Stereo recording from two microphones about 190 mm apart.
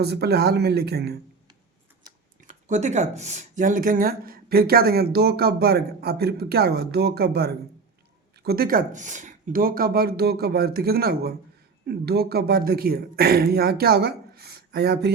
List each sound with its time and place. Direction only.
0.0 s speech: 55° right (ahead or behind)
2.5 s speech: 40° right (ahead or behind); by 15.1 s 60° right (ahead or behind)